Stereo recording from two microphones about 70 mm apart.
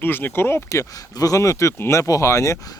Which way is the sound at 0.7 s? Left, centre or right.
Left.